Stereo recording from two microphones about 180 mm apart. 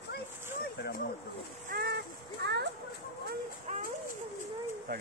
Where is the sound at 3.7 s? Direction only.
40° right (ahead or behind).